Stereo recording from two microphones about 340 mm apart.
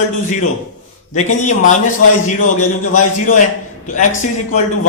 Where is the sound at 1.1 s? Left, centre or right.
Left.